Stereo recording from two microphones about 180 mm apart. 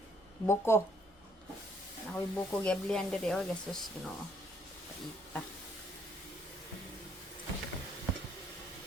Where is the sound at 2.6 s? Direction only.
5° left (ahead or behind).